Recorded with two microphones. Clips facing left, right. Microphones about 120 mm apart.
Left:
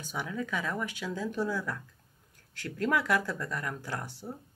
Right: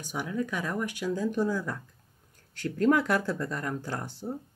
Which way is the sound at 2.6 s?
30° right (ahead or behind).